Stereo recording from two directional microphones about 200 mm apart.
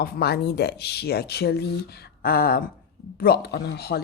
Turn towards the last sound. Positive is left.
turn(degrees=55)  # may be behind; listen again after turning